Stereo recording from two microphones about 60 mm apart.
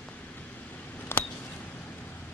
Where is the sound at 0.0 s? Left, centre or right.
Left.